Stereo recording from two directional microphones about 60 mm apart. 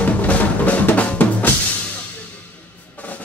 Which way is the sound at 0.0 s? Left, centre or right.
Left.